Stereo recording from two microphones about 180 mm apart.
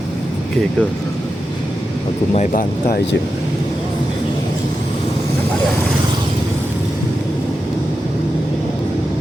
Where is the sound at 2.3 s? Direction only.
45° left (ahead or behind).